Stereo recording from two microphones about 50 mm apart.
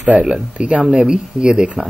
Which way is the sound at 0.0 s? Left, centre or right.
Right.